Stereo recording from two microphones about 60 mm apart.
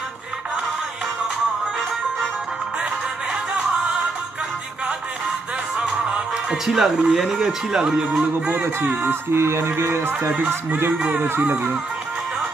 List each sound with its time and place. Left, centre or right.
6.0 s music: centre
6.5 s speech: centre
8.2 s speech: right
8.6 s music: right
11.0 s speech: centre
11.2 s music: right